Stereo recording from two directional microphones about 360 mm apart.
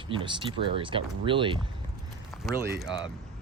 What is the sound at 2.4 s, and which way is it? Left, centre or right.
Speech, centre.